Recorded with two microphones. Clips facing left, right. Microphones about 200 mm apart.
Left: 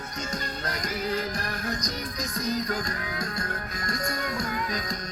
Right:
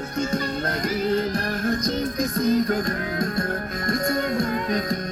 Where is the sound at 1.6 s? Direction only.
55° right (ahead or behind).